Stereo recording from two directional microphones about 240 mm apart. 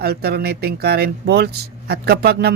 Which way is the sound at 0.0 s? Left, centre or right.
Right.